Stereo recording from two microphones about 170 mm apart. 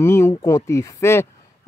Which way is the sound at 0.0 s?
15° left (ahead or behind).